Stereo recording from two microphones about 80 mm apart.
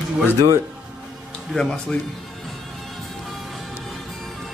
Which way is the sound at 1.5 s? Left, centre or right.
Centre.